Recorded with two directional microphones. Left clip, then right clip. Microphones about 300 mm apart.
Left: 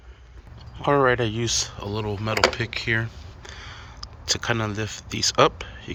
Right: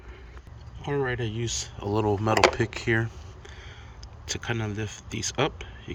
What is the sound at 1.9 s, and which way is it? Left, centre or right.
Speech, centre.